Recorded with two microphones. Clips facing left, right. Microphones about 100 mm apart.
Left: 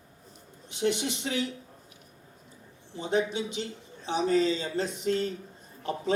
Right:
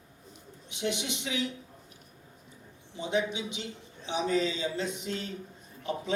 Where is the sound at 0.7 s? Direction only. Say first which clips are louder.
Left 4 dB; 35° left (ahead or behind).